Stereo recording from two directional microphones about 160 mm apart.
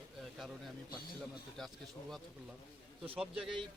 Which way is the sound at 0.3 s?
Centre (ahead or behind).